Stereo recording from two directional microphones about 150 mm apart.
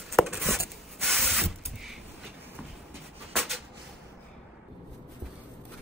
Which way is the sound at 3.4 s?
Centre (ahead or behind).